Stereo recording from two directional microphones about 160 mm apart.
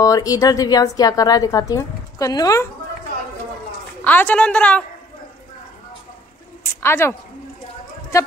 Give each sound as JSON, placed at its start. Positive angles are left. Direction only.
{"t": 0.0, "sound": "a woman's voice", "side_deg": 20}
{"t": 4.0, "sound": "a woman's voice", "side_deg": 10}
{"t": 6.6, "sound": "a woman's voice", "side_deg": 15}